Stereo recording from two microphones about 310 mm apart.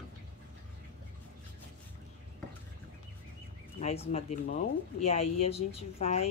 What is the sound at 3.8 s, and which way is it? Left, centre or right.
Speech, left.